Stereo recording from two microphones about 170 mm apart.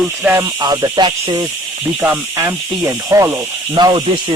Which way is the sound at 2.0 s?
10° right (ahead or behind).